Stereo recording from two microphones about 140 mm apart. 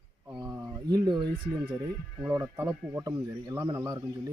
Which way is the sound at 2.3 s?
25° right (ahead or behind).